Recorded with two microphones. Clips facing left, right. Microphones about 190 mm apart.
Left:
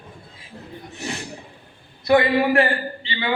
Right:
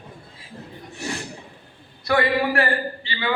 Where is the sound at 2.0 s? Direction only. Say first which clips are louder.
Left 4 dB; 20° left (ahead or behind).